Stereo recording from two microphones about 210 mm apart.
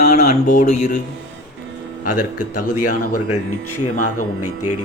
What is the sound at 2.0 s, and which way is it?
Speech, 40° left (ahead or behind).